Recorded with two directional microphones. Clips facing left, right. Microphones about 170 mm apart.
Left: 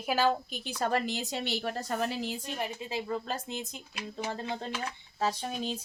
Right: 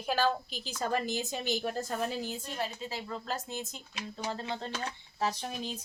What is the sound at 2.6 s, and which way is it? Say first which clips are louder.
Speech: left 1 dB; 20° left (ahead or behind).